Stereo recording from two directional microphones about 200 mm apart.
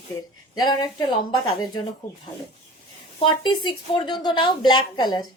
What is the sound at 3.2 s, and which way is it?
A woman's voice, 25° left (ahead or behind).